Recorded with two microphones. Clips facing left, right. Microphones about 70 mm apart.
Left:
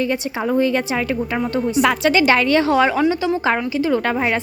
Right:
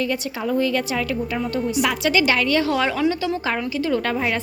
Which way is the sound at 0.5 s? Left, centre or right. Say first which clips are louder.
Left 3 dB; left.